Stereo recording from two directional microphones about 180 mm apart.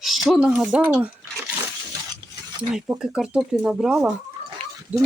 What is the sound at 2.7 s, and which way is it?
Speech, 5° right (ahead or behind).